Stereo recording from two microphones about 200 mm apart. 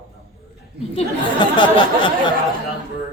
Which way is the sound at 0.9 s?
25° left (ahead or behind).